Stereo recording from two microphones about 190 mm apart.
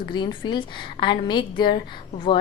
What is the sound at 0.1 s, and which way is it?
A woman's voice, 25° left (ahead or behind).